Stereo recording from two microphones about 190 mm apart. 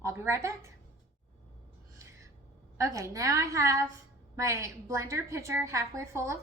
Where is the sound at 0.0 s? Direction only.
15° right (ahead or behind).